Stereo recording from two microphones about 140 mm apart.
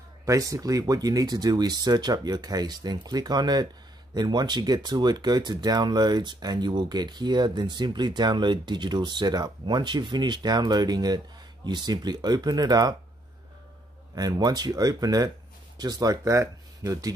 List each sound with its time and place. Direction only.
0.2 s speech: 25° right (ahead or behind)
14.1 s speech: 30° right (ahead or behind)